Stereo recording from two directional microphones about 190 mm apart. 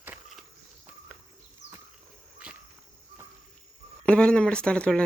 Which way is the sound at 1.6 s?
70° left (ahead or behind).